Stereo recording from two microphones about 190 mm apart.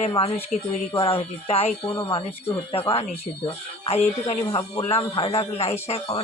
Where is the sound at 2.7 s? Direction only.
30° left (ahead or behind).